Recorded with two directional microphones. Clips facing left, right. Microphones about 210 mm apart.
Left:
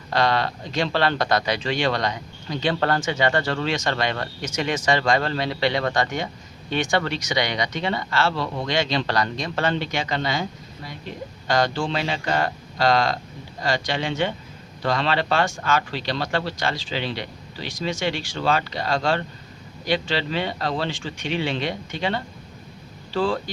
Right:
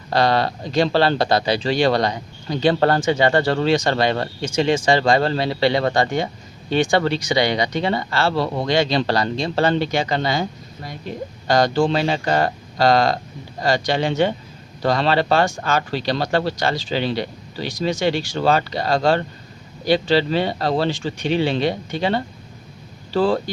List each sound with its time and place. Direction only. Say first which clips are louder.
0.1 s speech: right 4 dB; 35° right (ahead or behind)
11.4 s speech: right 5 dB; 40° right (ahead or behind)